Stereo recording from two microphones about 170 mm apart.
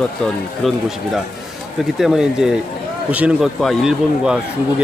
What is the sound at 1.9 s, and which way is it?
A man's voice, 5° right (ahead or behind).